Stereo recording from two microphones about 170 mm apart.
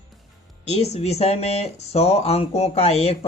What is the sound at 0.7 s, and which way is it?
Speech, 40° left (ahead or behind).